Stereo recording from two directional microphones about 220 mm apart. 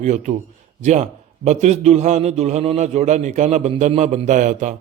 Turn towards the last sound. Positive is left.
turn(degrees=-35)  # may be behind; listen again after turning